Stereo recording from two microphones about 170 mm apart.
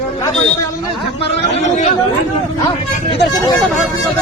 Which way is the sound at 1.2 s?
40° left (ahead or behind).